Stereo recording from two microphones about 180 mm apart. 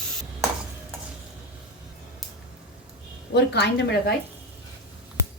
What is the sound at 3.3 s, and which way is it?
Speech, 70° left (ahead or behind).